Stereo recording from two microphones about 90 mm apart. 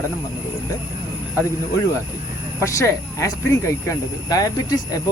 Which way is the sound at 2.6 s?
35° left (ahead or behind).